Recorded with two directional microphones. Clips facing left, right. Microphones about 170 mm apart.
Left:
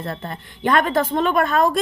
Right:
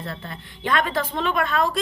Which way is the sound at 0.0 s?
45° left (ahead or behind).